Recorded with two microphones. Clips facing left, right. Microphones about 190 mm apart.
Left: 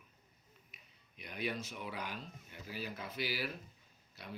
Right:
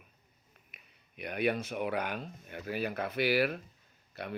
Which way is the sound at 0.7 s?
60° right (ahead or behind).